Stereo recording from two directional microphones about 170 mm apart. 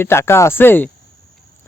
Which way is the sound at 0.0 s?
15° left (ahead or behind).